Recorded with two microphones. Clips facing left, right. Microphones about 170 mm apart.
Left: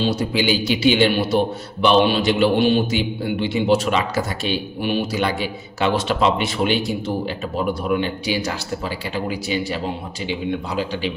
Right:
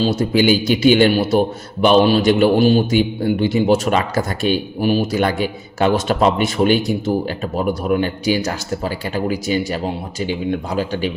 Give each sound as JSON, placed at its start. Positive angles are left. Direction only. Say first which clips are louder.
{"t": 0.0, "sound": "a man's voice", "louder": "right 5 dB", "side_deg": -45}